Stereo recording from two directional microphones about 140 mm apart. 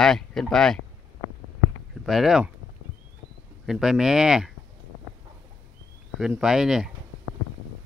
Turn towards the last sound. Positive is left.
turn(degrees=-5)  # may be behind; listen again after turning